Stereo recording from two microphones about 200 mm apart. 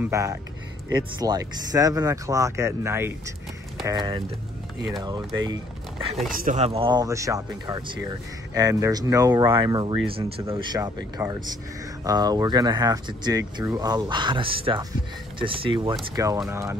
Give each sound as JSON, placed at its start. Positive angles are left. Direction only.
{"t": 0.0, "sound": "speech", "side_deg": -15}
{"t": 6.3, "sound": "speech", "side_deg": -40}